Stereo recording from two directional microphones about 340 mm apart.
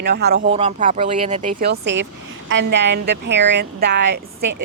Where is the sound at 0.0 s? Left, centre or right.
Right.